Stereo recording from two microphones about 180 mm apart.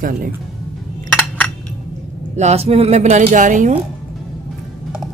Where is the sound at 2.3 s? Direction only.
35° right (ahead or behind).